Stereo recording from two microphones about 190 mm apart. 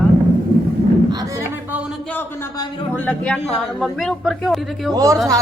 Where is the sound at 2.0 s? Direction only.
10° left (ahead or behind).